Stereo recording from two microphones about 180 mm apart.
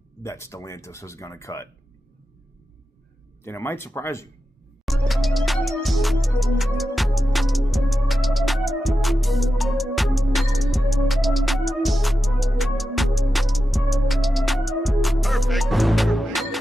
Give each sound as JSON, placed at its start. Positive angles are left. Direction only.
{"t": 0.2, "sound": "speech", "side_deg": 15}
{"t": 3.4, "sound": "speech", "side_deg": 15}
{"t": 5.0, "sound": "music", "side_deg": 0}